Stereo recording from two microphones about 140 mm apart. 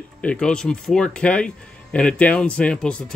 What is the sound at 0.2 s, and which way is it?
Speech, 10° left (ahead or behind).